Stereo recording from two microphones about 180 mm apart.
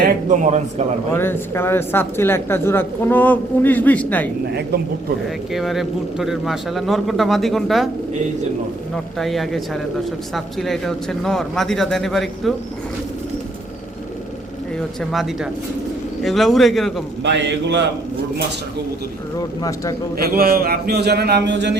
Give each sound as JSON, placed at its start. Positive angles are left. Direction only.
{"t": 0.3, "sound": "speech", "side_deg": -40}
{"t": 1.1, "sound": "speech", "side_deg": 10}
{"t": 5.5, "sound": "a man's voice", "side_deg": 0}
{"t": 9.1, "sound": "a man's voice", "side_deg": 0}
{"t": 15.1, "sound": "a man's voice", "side_deg": 0}
{"t": 17.2, "sound": "a man's voice", "side_deg": -85}
{"t": 19.4, "sound": "speech", "side_deg": 20}
{"t": 20.1, "sound": "a man's voice", "side_deg": -55}